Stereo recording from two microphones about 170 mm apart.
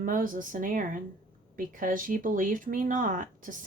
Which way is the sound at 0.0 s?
50° right (ahead or behind).